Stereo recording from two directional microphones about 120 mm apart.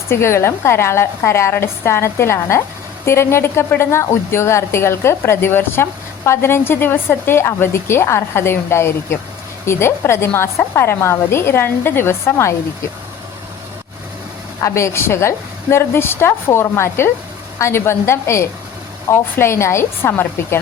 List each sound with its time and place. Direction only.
0.1 s speech: 20° left (ahead or behind)
14.6 s speech: 25° left (ahead or behind)